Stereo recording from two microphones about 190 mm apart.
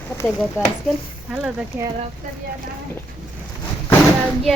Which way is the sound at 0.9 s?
5° right (ahead or behind).